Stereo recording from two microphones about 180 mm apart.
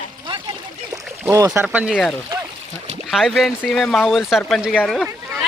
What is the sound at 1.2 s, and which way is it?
Speech, 15° right (ahead or behind).